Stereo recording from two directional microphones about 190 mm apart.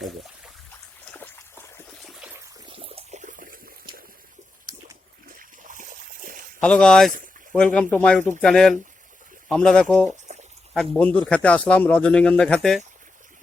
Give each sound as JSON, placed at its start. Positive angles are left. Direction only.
{"t": 2.6, "sound": "water", "side_deg": -30}
{"t": 5.4, "sound": "a sound", "side_deg": -45}
{"t": 6.6, "sound": "speech", "side_deg": 5}